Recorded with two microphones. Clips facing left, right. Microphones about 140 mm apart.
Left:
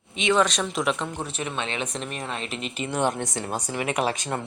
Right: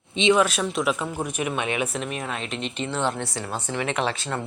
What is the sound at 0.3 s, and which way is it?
Speech, 5° right (ahead or behind).